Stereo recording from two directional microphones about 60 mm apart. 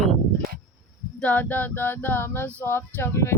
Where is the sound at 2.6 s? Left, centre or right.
Left.